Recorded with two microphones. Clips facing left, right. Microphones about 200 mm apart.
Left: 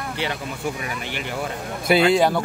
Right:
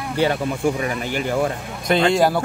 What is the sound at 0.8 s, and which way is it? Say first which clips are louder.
Speech: right 7 dB; 40° right (ahead or behind).